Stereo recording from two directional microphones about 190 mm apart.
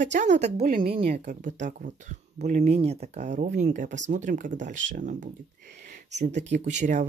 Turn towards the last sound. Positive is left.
turn(degrees=-40)  # may be behind; listen again after turning